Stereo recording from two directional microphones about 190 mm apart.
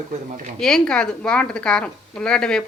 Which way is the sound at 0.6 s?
5° left (ahead or behind).